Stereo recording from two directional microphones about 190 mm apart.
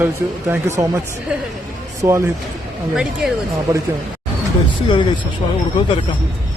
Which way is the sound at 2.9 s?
5° right (ahead or behind).